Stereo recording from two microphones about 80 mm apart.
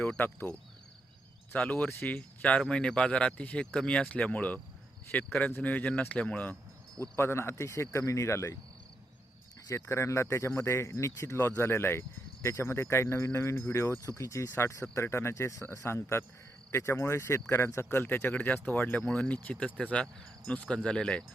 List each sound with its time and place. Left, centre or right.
0.2 s speech: left
1.5 s speech: centre
7.2 s speech: left
9.6 s speech: left; by 21.2 s centre